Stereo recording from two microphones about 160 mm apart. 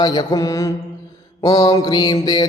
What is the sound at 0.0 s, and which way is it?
Mantra, 25° left (ahead or behind).